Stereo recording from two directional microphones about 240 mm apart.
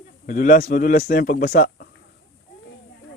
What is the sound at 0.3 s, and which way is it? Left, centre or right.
A man's voice, left.